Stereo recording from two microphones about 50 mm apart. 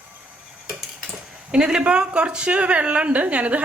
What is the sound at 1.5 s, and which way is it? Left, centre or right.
A woman's voice, centre.